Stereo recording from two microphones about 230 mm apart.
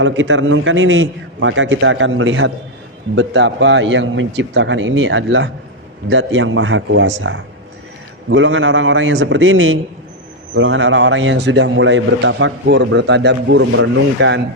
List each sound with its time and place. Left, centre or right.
0.0 s a man's voice: right